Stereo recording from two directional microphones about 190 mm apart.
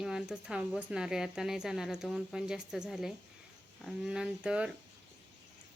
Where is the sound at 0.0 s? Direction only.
5° right (ahead or behind).